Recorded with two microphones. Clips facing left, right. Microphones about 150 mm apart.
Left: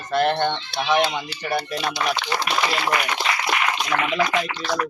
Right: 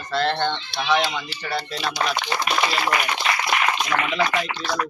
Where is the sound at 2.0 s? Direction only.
35° right (ahead or behind).